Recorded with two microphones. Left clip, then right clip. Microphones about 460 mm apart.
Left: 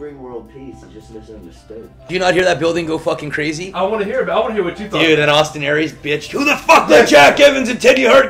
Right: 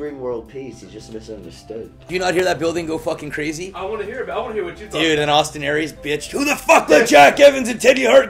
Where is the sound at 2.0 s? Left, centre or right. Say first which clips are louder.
Left 5 dB; centre.